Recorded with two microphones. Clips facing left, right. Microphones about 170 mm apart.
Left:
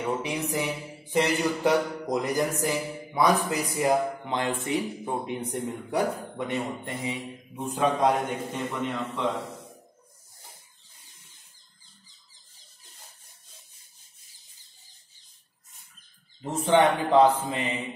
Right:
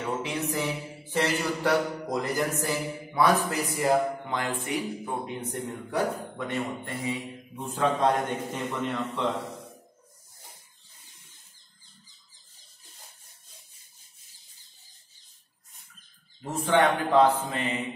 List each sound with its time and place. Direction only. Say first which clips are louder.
0.0 s a sound: left 1 dB; 15° left (ahead or behind)
8.7 s a man's voice: right 2 dB; centre (ahead or behind)
16.4 s a man's voice: left 2 dB; 20° left (ahead or behind)